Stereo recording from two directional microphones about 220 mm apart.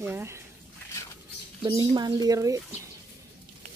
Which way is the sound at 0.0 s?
10° right (ahead or behind).